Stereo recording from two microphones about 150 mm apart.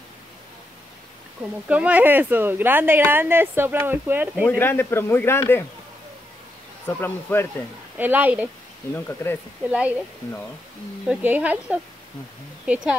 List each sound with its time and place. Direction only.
1.7 s speech: 10° right (ahead or behind)
4.5 s a man's voice: 15° left (ahead or behind)
6.9 s a man's voice: 15° left (ahead or behind)
8.0 s speech: 10° right (ahead or behind)
8.9 s a man's voice: 15° left (ahead or behind)
9.7 s speech: 10° right (ahead or behind)
11.1 s speech: 10° right (ahead or behind)